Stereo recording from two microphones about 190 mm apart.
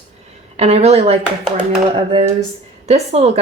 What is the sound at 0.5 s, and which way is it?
Speech, 35° right (ahead or behind).